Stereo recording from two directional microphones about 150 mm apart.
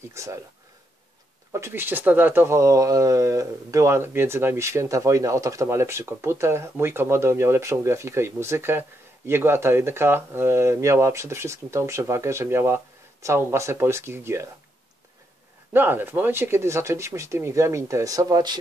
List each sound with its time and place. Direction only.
0.1 s speech: 20° right (ahead or behind)
1.5 s speech: 15° right (ahead or behind)
15.7 s speech: 15° right (ahead or behind)